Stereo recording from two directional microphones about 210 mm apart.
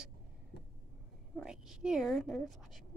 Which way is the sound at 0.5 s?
50° left (ahead or behind).